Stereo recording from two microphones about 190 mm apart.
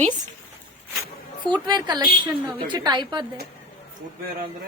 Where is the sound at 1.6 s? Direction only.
20° right (ahead or behind).